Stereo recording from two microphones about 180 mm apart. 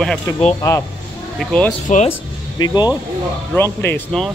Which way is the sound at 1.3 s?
5° left (ahead or behind).